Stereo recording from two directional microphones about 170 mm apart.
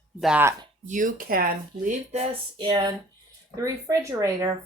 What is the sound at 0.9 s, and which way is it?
Speech, 50° right (ahead or behind).